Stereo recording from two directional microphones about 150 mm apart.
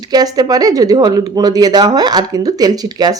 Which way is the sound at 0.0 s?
25° right (ahead or behind).